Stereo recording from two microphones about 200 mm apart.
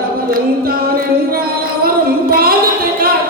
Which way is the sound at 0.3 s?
45° right (ahead or behind).